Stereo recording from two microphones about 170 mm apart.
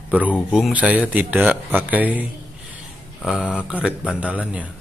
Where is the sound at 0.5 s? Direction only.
Centre (ahead or behind).